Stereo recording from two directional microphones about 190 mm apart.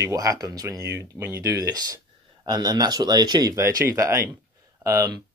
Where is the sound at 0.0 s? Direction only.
15° right (ahead or behind).